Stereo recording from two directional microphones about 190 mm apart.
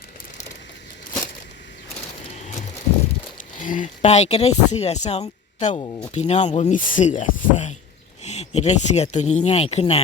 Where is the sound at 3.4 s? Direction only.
45° left (ahead or behind).